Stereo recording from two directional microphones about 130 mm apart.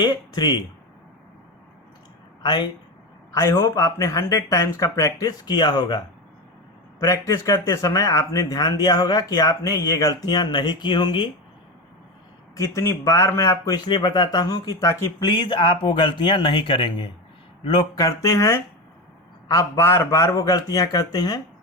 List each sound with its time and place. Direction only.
0.0 s speech: 35° left (ahead or behind)
2.4 s speech: 35° left (ahead or behind)
3.3 s speech: 20° left (ahead or behind)
7.0 s speech: 30° left (ahead or behind)
12.5 s speech: 25° left (ahead or behind)
15.2 s speech: 35° left (ahead or behind)